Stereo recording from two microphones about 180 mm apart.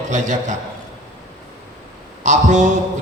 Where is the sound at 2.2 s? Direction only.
40° right (ahead or behind).